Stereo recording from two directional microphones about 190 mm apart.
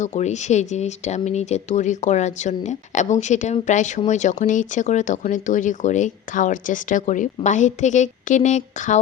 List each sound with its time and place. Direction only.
0.0 s speech: 35° left (ahead or behind)